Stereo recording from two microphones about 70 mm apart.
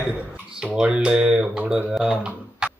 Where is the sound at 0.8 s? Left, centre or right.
Centre.